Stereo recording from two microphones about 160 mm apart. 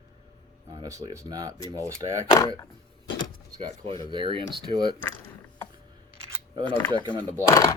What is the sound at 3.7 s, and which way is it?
Speech, 35° right (ahead or behind).